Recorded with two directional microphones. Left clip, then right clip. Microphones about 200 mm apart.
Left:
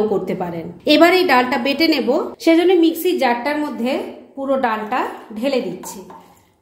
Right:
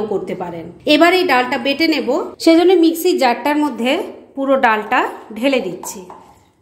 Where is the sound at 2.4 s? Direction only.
25° right (ahead or behind).